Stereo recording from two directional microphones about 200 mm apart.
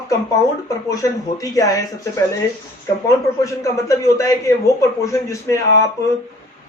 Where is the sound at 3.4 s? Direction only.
15° left (ahead or behind).